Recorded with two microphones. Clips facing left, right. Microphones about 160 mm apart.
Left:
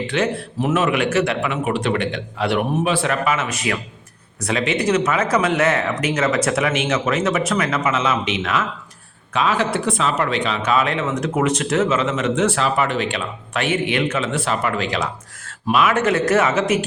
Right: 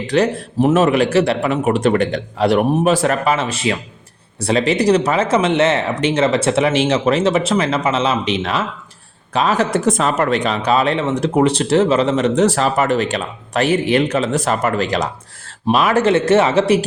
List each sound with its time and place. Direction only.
0.1 s speech: 35° right (ahead or behind)